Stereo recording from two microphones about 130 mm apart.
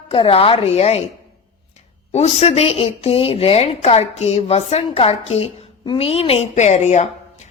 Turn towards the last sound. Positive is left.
turn(degrees=60)  # may be behind; listen again after turning